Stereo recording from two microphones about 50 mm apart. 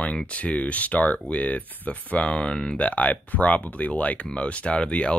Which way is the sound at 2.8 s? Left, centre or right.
Left.